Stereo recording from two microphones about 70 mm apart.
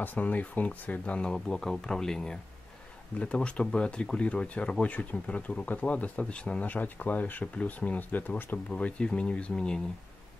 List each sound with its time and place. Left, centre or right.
0.0 s speech: left
1.3 s speech: centre